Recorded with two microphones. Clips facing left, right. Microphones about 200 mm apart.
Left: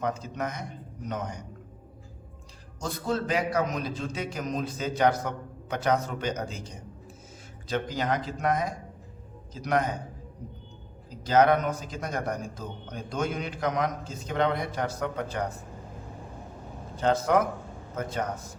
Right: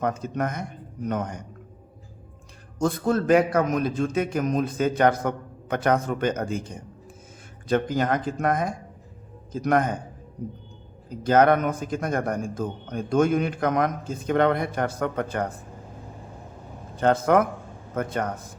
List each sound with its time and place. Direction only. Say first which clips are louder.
0.0 s a man's voice: right 5 dB; 55° right (ahead or behind)
2.7 s a man's voice: right 7 dB; 55° right (ahead or behind)
11.1 s a man's voice: right 3 dB; 50° right (ahead or behind)
17.0 s a man's voice: right 4 dB; 55° right (ahead or behind)